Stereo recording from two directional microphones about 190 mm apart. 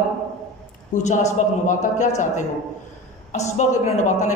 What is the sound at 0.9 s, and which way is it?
A woman's voice, 40° left (ahead or behind).